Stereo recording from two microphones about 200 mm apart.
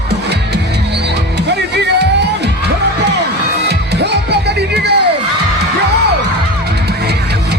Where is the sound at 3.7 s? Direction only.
55° right (ahead or behind).